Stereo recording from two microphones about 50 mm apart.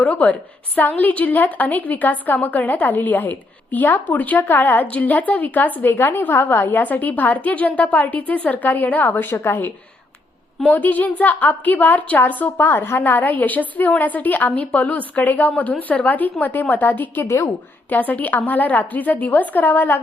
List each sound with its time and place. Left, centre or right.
0.0 s a woman's voice: left
4.4 s a woman's voice: left
4.9 s a woman's voice: left
5.8 s a woman's voice: left
9.3 s a woman's voice: left
10.7 s a woman's voice: left
12.5 s a woman's voice: left
13.1 s a woman's voice: left
17.2 s a woman's voice: left
17.8 s a woman's voice: left